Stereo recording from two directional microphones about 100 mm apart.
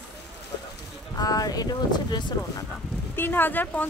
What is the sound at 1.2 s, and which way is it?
Speech, 40° left (ahead or behind).